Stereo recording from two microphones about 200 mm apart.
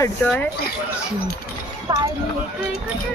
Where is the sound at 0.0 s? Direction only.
5° left (ahead or behind).